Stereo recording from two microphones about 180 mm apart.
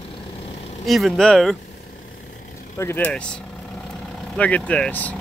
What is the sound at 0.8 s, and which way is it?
Speech, centre (ahead or behind).